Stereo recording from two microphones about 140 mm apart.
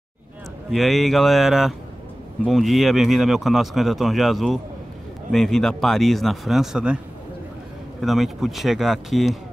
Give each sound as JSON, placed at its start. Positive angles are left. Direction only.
{"t": 0.7, "sound": "speech", "side_deg": 0}
{"t": 8.0, "sound": "speech", "side_deg": 0}